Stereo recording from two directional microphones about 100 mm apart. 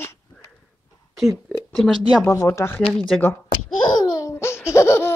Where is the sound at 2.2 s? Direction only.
30° left (ahead or behind).